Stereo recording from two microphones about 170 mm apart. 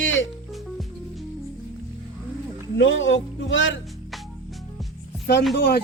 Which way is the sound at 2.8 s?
90° left.